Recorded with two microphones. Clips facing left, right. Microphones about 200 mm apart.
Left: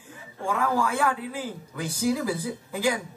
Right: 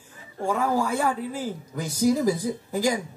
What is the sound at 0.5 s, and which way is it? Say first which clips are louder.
Speech: right 1 dB; 40° right (ahead or behind).